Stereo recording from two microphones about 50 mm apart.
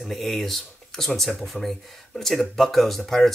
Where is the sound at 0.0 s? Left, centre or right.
Centre.